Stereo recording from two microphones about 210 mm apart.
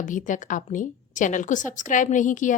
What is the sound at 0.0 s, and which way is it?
A woman's voice, 40° left (ahead or behind).